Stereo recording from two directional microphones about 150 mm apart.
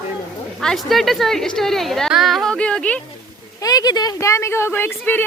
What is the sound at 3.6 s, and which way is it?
Speech, 25° left (ahead or behind).